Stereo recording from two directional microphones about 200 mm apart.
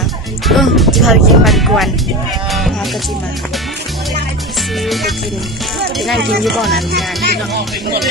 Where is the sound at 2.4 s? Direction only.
Centre (ahead or behind).